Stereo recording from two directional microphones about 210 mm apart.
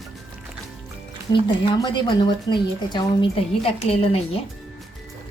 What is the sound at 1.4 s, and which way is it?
A woman's voice, 20° left (ahead or behind).